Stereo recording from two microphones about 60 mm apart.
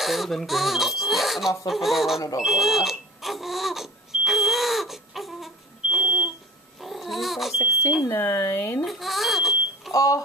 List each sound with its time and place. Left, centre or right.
0.0 s speech: centre
2.1 s speech: left
2.4 s smoke detector: centre
6.8 s babbling: centre
8.1 s speech: left
8.8 s smoke detector: centre
9.9 s speech: left